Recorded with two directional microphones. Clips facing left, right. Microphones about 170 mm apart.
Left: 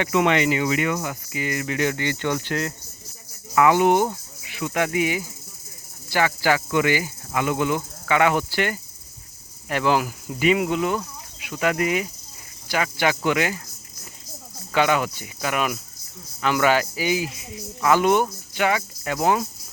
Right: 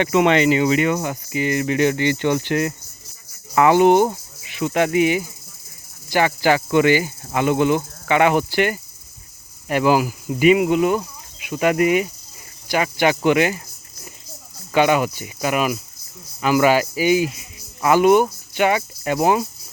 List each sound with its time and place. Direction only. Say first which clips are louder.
0.0 s cricket: right 4 dB; 30° right (ahead or behind)
3.5 s speech: right 4 dB; 30° right (ahead or behind)
6.1 s cricket: right 4 dB; 20° right (ahead or behind)
9.6 s speech: right 4 dB; 10° right (ahead or behind)
12.7 s cricket: right 4 dB; 20° right (ahead or behind)
14.7 s speech: right 4 dB; 15° right (ahead or behind)